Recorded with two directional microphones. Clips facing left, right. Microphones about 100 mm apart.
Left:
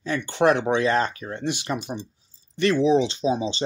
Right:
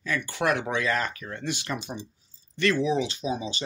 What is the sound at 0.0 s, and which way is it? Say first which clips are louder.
Speech: left 7 dB; 25° left (ahead or behind).